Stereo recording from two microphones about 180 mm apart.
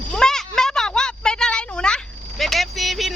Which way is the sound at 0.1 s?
5° left (ahead or behind).